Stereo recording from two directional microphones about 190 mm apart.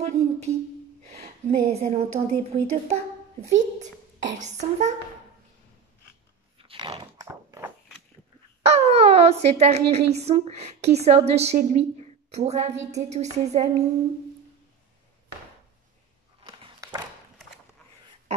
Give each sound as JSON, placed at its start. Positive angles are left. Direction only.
{"t": 0.0, "sound": "a sound", "side_deg": -35}
{"t": 1.0, "sound": "a woman's voice", "side_deg": -35}
{"t": 6.6, "sound": "biting", "side_deg": -30}
{"t": 7.2, "sound": "a sound", "side_deg": -15}
{"t": 8.6, "sound": "a woman's voice", "side_deg": -35}
{"t": 16.4, "sound": "biting", "side_deg": -20}